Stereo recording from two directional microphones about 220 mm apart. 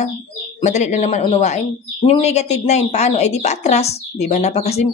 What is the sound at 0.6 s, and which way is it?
Speech, 30° left (ahead or behind).